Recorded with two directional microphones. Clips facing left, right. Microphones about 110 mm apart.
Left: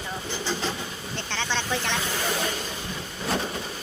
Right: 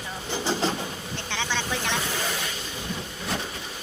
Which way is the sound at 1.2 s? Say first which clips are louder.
Left 1 dB; 15° right (ahead or behind).